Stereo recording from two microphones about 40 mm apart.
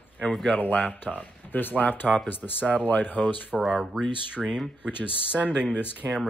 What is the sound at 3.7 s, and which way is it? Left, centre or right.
Speech, right.